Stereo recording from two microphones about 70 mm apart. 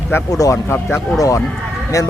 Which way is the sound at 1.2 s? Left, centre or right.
Left.